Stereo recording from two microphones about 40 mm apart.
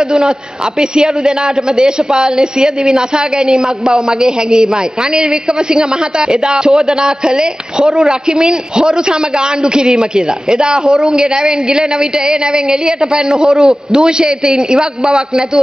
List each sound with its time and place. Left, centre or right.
0.7 s a woman's voice: centre